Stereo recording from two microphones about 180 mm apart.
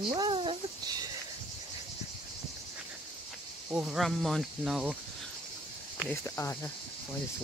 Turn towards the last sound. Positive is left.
turn(degrees=15)  # may be behind; listen again after turning